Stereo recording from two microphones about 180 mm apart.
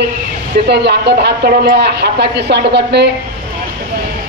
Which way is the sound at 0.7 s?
70° right (ahead or behind).